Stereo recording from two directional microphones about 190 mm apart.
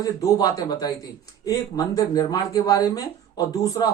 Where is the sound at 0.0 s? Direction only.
20° left (ahead or behind).